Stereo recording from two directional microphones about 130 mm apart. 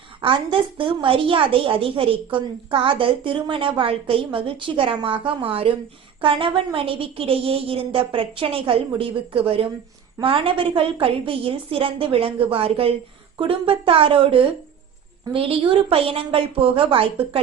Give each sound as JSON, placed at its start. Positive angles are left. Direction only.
{"t": 0.2, "sound": "a woman's voice", "side_deg": -40}
{"t": 6.7, "sound": "a woman's voice", "side_deg": -40}